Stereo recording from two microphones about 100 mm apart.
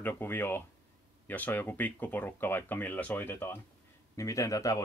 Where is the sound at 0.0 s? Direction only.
20° left (ahead or behind).